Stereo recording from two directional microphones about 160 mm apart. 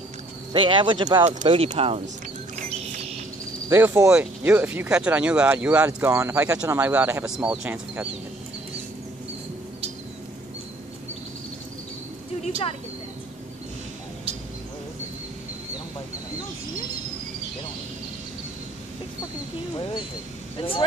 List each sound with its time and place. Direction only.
0.5 s speech: 30° right (ahead or behind)
1.2 s speech: 40° right (ahead or behind)
3.6 s speech: 15° right (ahead or behind)
19.7 s speech: 30° left (ahead or behind)